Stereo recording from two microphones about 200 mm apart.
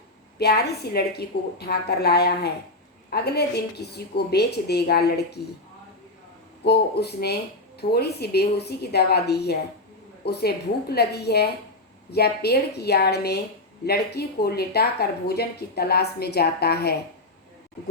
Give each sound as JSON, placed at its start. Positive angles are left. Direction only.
{"t": 0.3, "sound": "a woman's voice", "side_deg": 55}
{"t": 6.7, "sound": "a woman's voice", "side_deg": 55}